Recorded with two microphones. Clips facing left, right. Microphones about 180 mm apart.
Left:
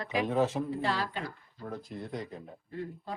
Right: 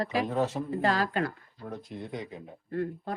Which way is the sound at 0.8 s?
40° right (ahead or behind).